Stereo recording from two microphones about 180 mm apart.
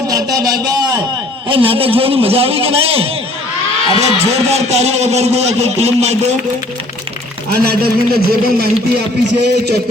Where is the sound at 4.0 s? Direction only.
35° right (ahead or behind).